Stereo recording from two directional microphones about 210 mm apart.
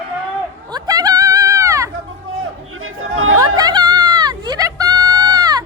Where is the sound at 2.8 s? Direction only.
80° right.